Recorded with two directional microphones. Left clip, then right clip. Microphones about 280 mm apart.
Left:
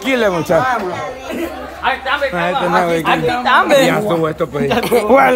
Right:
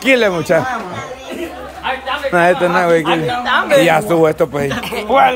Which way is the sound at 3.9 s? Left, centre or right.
Centre.